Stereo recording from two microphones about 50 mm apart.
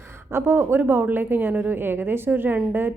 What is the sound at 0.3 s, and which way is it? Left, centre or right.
Speech, right.